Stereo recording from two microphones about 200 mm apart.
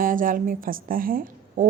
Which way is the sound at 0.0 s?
45° right (ahead or behind).